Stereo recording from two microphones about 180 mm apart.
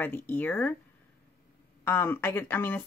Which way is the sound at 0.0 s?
10° left (ahead or behind).